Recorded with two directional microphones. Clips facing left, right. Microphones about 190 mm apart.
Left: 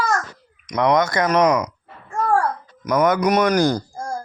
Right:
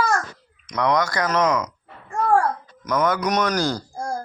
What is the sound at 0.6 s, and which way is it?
Speech, 20° left (ahead or behind).